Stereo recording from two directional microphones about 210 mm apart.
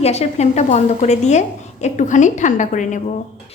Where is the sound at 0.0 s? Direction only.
30° left (ahead or behind).